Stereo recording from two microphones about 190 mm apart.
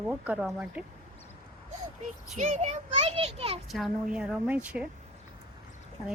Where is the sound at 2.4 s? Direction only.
35° right (ahead or behind).